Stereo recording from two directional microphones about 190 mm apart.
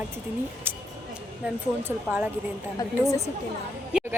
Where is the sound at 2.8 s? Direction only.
15° left (ahead or behind).